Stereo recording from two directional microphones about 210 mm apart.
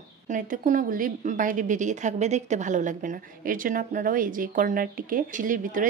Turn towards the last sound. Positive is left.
turn(degrees=-40)  # may be behind; listen again after turning